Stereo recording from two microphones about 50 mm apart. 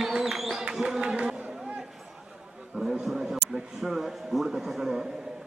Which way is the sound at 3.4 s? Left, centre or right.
Centre.